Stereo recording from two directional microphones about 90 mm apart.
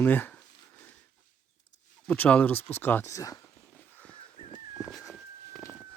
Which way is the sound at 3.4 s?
20° left (ahead or behind).